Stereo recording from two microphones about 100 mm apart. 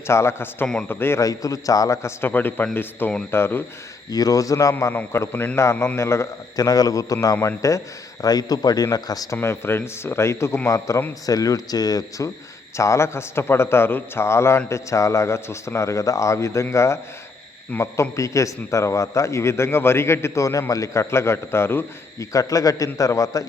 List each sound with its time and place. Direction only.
0.1 s a man's voice: 25° left (ahead or behind)
4.1 s a man's voice: 35° left (ahead or behind)
4.9 s a man's voice: 25° left (ahead or behind)
5.7 s a man's voice: 15° left (ahead or behind)
6.0 s a man's voice: 25° left (ahead or behind)
22.3 s a man's voice: 35° left (ahead or behind)